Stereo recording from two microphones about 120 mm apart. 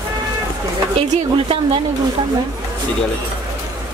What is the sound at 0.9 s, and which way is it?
Speech, 50° right (ahead or behind).